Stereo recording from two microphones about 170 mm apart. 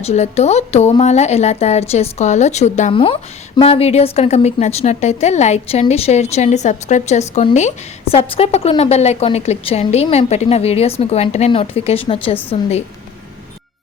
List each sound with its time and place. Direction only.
0.0 s a woman's voice: 40° left (ahead or behind)
2.9 s a woman's voice: 30° left (ahead or behind)